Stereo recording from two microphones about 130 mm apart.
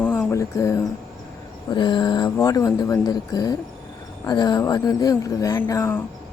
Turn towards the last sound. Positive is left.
turn(degrees=20)  # may be behind; listen again after turning